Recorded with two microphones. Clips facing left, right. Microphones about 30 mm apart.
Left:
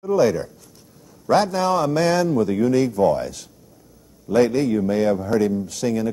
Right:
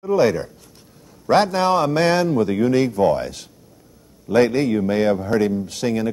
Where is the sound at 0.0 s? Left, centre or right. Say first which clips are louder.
Right 1 dB; right.